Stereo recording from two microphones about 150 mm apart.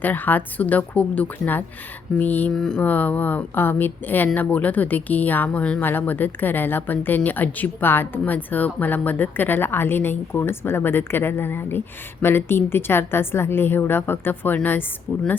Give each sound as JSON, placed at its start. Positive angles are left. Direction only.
{"t": 0.0, "sound": "a woman's voice", "side_deg": 10}